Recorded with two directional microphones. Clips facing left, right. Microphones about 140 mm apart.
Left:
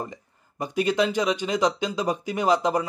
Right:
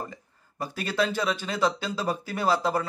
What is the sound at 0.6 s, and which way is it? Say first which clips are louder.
Speech: left 5 dB; 15° left (ahead or behind).